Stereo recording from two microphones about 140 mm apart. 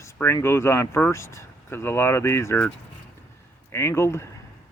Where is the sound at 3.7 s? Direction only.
15° left (ahead or behind).